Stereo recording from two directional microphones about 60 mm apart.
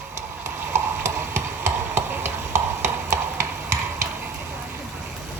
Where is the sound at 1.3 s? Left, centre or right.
Right.